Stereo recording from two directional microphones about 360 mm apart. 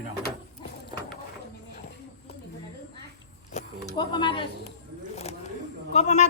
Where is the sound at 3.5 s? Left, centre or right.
Centre.